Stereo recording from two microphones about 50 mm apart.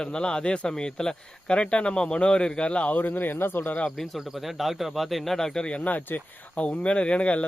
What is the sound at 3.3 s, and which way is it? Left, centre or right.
Speech, left.